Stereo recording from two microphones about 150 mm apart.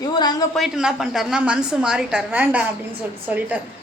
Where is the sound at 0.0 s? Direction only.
25° left (ahead or behind).